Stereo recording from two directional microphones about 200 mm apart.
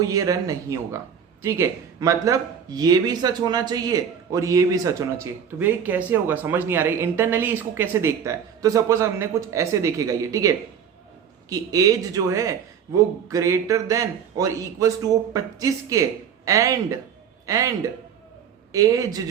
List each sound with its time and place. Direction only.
0.0 s a man's voice: 15° right (ahead or behind)
18.7 s speech: 15° right (ahead or behind)